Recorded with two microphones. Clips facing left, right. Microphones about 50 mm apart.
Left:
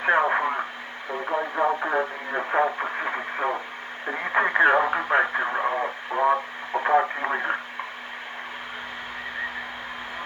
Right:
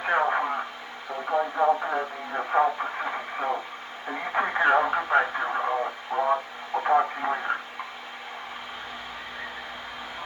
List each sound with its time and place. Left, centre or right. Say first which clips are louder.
0.0 s radio: left 3 dB; left
1.3 s speech: right 2 dB; left